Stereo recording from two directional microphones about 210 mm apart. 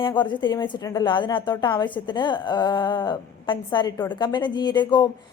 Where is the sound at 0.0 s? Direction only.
20° left (ahead or behind).